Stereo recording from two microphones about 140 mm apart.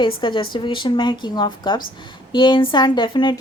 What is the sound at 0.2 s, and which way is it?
A woman's voice, 35° left (ahead or behind).